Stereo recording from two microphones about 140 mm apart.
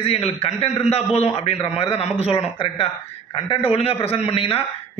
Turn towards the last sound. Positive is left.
turn(degrees=40)  # may be behind; listen again after turning